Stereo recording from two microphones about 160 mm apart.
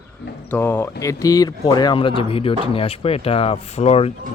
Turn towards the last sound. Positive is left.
turn(degrees=40)  # may be behind; listen again after turning